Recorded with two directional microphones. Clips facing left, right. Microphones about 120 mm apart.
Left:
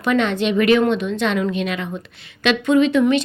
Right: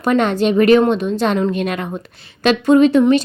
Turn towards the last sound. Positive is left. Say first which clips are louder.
# right 4 dB
turn(degrees=-40)  # may be behind; listen again after turning